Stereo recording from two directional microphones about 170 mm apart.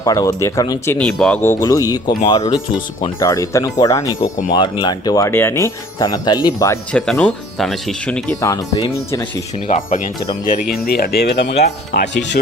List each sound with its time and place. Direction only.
0.0 s speech: 20° left (ahead or behind)
0.9 s speech: 5° left (ahead or behind); by 6.7 s 20° left (ahead or behind)
6.9 s speech: 5° left (ahead or behind)
8.4 s speech: 20° left (ahead or behind)
9.6 s speech: 45° left (ahead or behind)
10.7 s speech: 60° left (ahead or behind); by 12.4 s 85° left